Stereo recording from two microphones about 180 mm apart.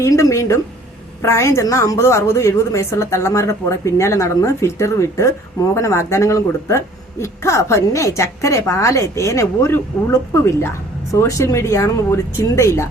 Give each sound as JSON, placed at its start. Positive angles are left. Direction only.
{"t": 0.0, "sound": "speech", "side_deg": 15}